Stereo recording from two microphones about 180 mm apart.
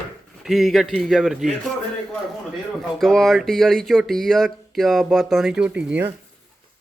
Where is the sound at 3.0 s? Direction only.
Centre (ahead or behind).